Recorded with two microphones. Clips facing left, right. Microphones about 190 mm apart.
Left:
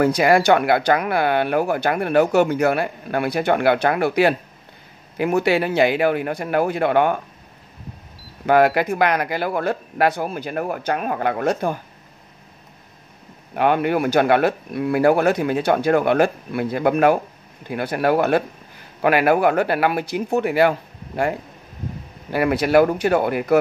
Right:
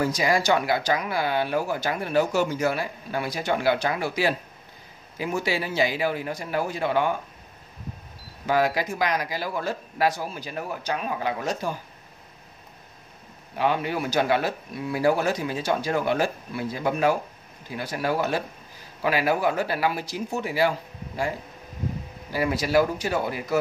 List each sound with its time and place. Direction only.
0.0 s speech: 60° left (ahead or behind)
8.5 s speech: 60° left (ahead or behind)
13.6 s speech: 60° left (ahead or behind)
22.3 s speech: 60° left (ahead or behind)